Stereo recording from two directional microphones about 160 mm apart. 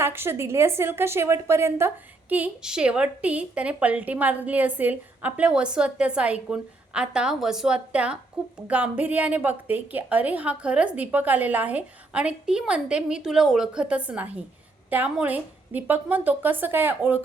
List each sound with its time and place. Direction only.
0.0 s a woman's voice: 15° right (ahead or behind)